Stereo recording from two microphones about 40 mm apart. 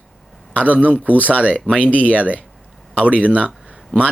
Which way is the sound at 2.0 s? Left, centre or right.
Right.